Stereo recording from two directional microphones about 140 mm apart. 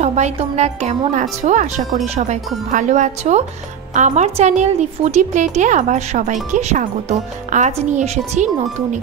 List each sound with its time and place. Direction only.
0.0 s a woman's voice: 55° right (ahead or behind)
2.7 s a woman's voice: 60° right (ahead or behind)